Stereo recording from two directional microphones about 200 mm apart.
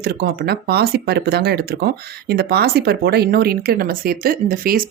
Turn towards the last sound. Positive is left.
turn(degrees=-45)  # may be behind; listen again after turning